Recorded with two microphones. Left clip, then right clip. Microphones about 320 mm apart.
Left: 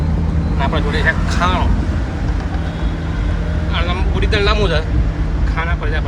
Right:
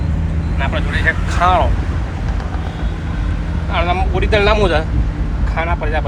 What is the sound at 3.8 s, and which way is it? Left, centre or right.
Speech, centre.